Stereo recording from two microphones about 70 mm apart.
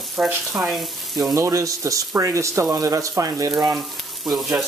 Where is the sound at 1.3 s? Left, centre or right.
Right.